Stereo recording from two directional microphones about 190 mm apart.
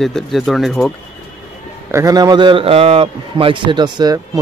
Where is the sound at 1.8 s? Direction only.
15° right (ahead or behind).